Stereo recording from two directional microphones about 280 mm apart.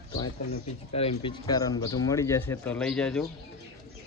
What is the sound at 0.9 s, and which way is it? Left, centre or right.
Speech, centre.